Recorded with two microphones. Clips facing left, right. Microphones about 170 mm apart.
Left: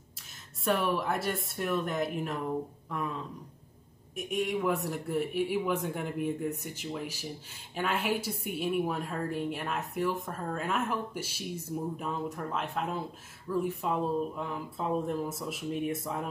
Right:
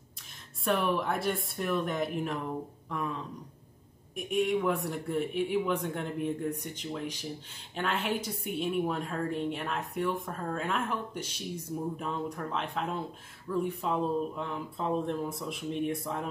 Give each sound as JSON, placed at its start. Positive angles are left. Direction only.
{"t": 0.7, "sound": "a woman's voice", "side_deg": 0}